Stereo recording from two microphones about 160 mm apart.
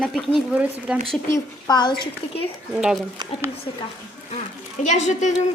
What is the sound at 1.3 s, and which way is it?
Speech, 25° left (ahead or behind).